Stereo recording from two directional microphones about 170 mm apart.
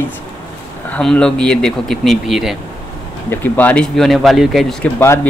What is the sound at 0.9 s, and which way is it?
Speech, 5° left (ahead or behind).